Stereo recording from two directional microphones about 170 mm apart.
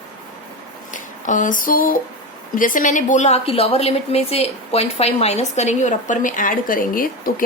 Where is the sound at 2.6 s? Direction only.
50° left (ahead or behind).